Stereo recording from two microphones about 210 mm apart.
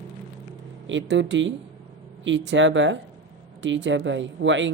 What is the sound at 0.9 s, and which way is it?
Speech, 60° right (ahead or behind).